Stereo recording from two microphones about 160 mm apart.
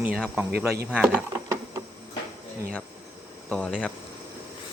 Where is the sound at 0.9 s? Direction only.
5° right (ahead or behind).